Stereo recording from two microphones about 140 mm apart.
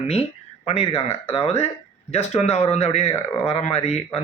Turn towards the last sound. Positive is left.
turn(degrees=50)  # may be behind; listen again after turning